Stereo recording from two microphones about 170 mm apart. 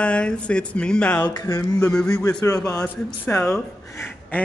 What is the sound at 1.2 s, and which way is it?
Speech, 20° left (ahead or behind).